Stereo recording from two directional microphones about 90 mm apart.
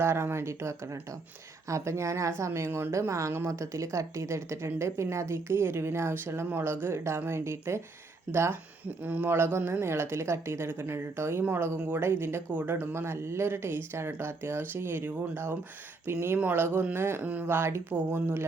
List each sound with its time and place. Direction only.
0.0 s speech: 30° right (ahead or behind)
1.7 s a woman's voice: 35° right (ahead or behind)